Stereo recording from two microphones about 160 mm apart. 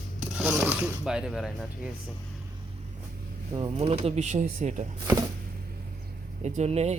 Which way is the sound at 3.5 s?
35° right (ahead or behind).